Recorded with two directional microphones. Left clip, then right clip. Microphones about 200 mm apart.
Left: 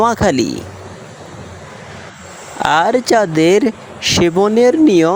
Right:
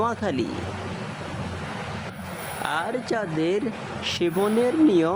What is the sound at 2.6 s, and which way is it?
Speech, 35° left (ahead or behind).